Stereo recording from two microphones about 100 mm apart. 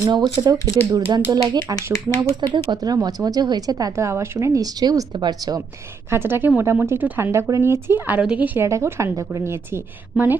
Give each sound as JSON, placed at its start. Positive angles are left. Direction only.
{"t": 0.1, "sound": "speech", "side_deg": -50}
{"t": 1.7, "sound": "speech", "side_deg": 35}
{"t": 2.3, "sound": "a woman's voice", "side_deg": -50}
{"t": 6.1, "sound": "a woman's voice", "side_deg": -25}